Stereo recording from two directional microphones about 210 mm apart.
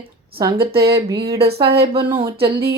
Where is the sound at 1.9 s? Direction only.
25° right (ahead or behind).